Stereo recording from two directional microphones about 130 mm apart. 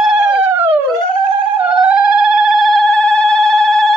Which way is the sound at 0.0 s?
5° right (ahead or behind).